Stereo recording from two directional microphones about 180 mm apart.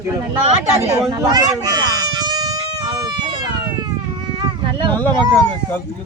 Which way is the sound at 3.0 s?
25° right (ahead or behind).